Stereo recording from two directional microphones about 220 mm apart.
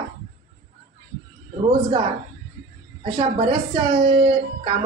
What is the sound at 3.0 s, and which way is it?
Speech, 25° right (ahead or behind).